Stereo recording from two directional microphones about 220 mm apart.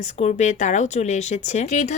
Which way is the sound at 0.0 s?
30° left (ahead or behind).